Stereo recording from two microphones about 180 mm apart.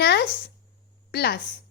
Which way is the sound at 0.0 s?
65° left (ahead or behind).